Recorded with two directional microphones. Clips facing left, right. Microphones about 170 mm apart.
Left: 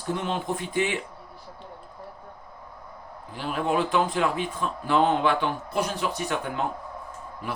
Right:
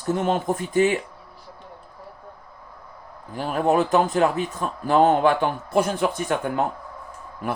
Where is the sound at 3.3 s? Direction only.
45° right (ahead or behind).